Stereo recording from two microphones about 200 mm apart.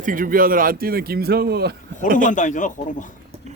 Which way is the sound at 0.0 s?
45° right (ahead or behind).